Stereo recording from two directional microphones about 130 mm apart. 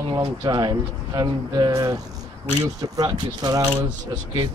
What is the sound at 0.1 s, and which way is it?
Speech, 25° right (ahead or behind).